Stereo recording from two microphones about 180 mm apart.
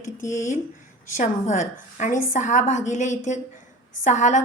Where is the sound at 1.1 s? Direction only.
45° left (ahead or behind).